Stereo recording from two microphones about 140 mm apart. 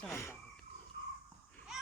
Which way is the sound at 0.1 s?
20° left (ahead or behind).